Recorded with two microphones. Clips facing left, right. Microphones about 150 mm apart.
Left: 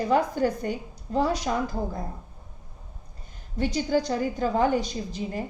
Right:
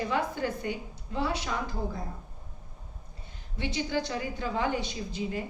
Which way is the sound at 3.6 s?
40° left (ahead or behind).